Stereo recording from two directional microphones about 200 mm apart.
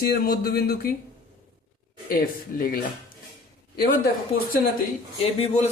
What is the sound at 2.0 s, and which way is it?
Speech, 45° left (ahead or behind).